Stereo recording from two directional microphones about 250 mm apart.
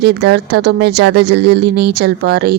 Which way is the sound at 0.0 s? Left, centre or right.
Right.